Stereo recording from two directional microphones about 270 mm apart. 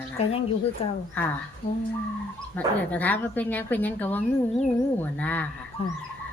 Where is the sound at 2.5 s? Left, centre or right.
Centre.